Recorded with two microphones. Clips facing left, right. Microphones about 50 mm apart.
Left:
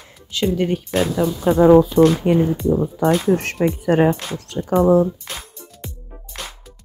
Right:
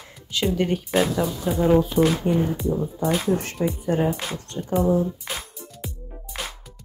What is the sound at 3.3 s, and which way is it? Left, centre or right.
Speech, left.